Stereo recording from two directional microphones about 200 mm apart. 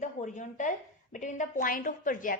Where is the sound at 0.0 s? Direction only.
40° left (ahead or behind).